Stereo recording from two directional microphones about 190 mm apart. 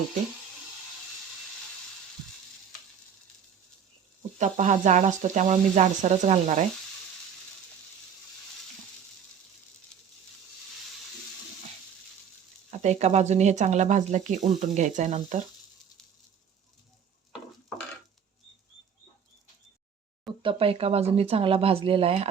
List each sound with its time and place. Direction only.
4.4 s speech: 40° right (ahead or behind)
12.7 s speech: 35° right (ahead or behind)
20.4 s speech: 30° right (ahead or behind)